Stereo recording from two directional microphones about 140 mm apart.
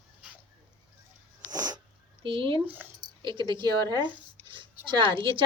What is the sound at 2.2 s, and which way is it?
Speech, 40° right (ahead or behind).